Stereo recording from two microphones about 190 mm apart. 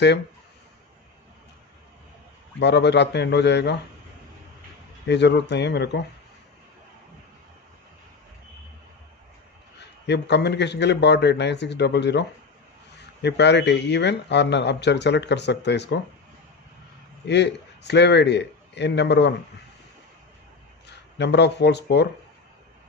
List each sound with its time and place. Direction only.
2.6 s a man's voice: 65° left (ahead or behind)
5.0 s a man's voice: 65° left (ahead or behind)
9.8 s a man's voice: 65° left (ahead or behind)
17.3 s a man's voice: 65° left (ahead or behind)
20.8 s speech: 65° left (ahead or behind)